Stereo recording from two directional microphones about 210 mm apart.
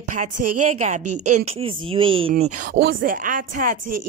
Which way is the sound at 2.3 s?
40° right (ahead or behind).